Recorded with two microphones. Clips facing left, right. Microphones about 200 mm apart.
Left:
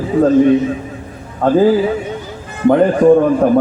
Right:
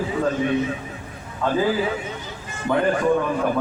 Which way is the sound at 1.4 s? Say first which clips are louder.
Left 10 dB; 55° left (ahead or behind).